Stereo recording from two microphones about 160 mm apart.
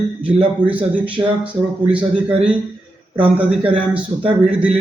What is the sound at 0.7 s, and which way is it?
Speech, 10° right (ahead or behind).